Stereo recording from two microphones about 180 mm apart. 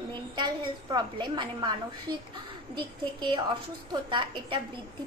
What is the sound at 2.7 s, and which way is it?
A woman's voice, 25° right (ahead or behind).